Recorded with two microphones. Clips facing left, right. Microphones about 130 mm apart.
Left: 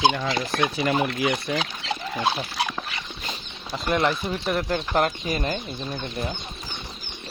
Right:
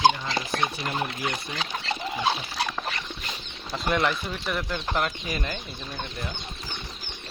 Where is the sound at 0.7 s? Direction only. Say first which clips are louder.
Left 7 dB; 90° left.